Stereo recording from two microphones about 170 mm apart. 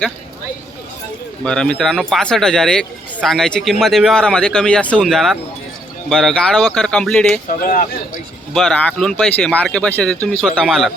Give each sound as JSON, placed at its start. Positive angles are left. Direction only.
{"t": 1.5, "sound": "speech", "side_deg": 5}
{"t": 7.4, "sound": "speech", "side_deg": 50}
{"t": 8.5, "sound": "speech", "side_deg": 5}